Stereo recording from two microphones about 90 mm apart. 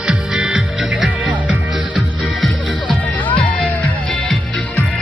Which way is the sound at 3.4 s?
15° left (ahead or behind).